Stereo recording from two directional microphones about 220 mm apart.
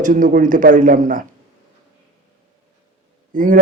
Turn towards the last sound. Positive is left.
turn(degrees=-40)  # may be behind; listen again after turning